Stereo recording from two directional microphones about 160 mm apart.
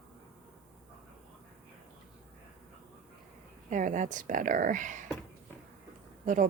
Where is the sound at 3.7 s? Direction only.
55° right (ahead or behind).